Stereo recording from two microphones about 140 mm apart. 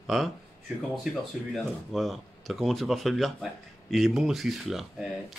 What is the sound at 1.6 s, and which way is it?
A man's voice, centre (ahead or behind).